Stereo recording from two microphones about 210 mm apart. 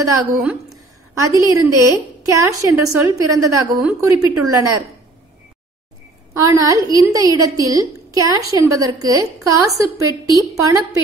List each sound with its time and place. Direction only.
0.2 s a woman's voice: 5° right (ahead or behind)
6.4 s a woman's voice: 15° right (ahead or behind)